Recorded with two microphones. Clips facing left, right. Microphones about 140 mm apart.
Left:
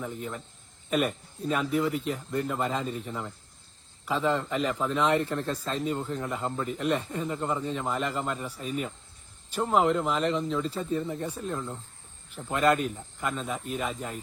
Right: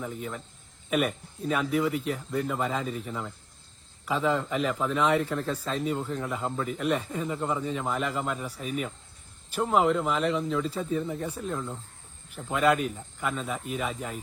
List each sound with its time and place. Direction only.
0.0 s a man's voice: centre (ahead or behind)